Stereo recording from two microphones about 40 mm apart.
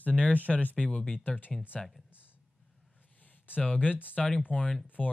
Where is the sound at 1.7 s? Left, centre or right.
Centre.